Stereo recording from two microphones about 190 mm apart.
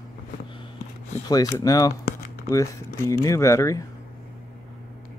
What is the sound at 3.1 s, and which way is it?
Speech, 15° left (ahead or behind).